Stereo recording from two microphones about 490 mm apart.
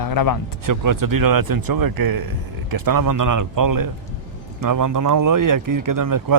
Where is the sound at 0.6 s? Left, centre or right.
Right.